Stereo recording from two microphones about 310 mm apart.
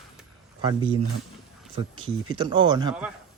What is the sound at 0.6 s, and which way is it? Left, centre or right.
Speech, centre.